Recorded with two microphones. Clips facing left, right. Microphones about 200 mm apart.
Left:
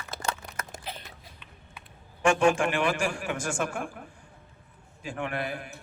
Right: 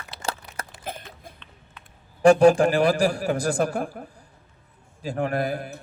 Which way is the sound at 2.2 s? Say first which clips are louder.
Right 8 dB; 35° right (ahead or behind).